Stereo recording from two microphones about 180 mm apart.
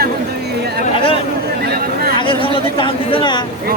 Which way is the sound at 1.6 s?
60° right (ahead or behind).